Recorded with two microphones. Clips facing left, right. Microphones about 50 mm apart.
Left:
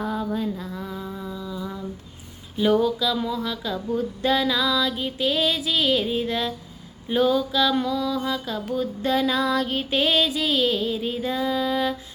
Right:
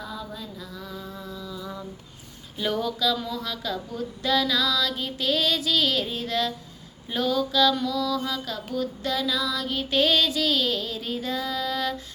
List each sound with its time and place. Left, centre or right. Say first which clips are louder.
0.0 s mantra: left 8 dB; left
0.5 s mantra: left 5 dB; left; by 1.8 s centre
2.6 s female singing: left 6 dB; centre
3.9 s female singing: left 3 dB; left
7.1 s a sound: left 4 dB; left
9.9 s a sound: even; centre